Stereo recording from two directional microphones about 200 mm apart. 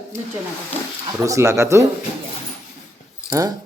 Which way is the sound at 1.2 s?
15° right (ahead or behind).